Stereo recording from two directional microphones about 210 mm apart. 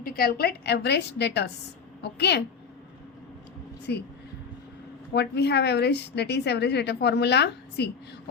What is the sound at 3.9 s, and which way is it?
Speech, 55° left (ahead or behind).